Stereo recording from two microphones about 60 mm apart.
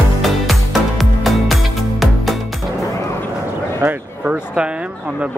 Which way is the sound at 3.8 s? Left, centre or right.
Right.